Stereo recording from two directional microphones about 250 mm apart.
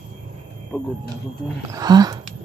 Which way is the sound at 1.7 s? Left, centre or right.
Centre.